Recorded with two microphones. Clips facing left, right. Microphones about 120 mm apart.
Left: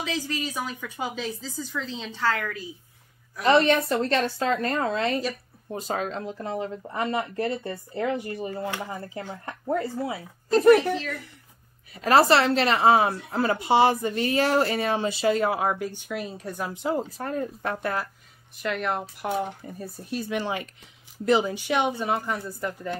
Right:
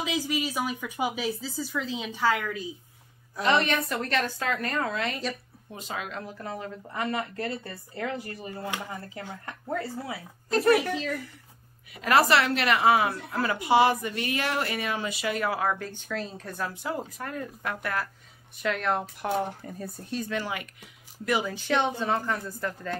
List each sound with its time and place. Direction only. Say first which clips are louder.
0.0 s speech: right 1 dB; 15° right (ahead or behind)
3.4 s a woman's voice: left 5 dB; 30° left (ahead or behind)
10.8 s speech: left 3 dB; 15° right (ahead or behind)
11.9 s a woman's voice: left 3 dB; 30° left (ahead or behind)
18.6 s speech: even; 5° left (ahead or behind)
20.3 s a woman's voice: left 3 dB; 25° left (ahead or behind)
21.5 s speech: left 1 dB; 15° left (ahead or behind)